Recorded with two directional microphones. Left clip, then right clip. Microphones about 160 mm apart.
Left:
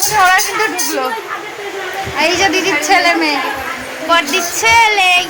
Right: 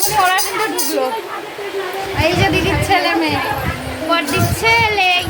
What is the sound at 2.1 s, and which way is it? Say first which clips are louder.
A woman's voice: left 3 dB; 20° left (ahead or behind).